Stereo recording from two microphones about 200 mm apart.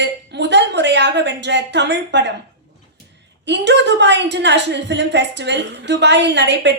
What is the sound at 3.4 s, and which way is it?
A woman's voice, 60° right (ahead or behind).